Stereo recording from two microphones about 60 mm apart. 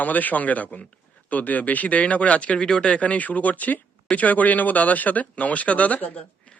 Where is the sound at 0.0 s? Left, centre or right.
Left.